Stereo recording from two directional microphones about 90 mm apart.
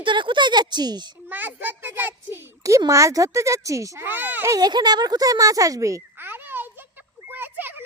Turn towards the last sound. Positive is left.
turn(degrees=-20)  # may be behind; listen again after turning